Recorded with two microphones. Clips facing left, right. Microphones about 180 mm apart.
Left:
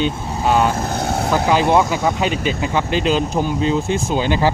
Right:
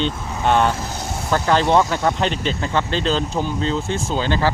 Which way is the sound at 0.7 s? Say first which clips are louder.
Left 7 dB; 55° left (ahead or behind).